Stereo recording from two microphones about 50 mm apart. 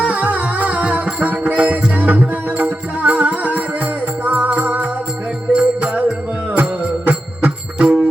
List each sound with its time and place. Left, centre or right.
0.0 s music: right
5.5 s music: centre
6.6 s music: right